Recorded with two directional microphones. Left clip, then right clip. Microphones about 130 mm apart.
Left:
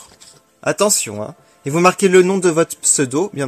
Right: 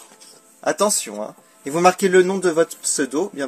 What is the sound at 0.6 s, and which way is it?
Speech, 45° left (ahead or behind).